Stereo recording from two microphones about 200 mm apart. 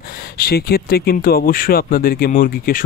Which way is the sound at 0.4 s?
50° left (ahead or behind).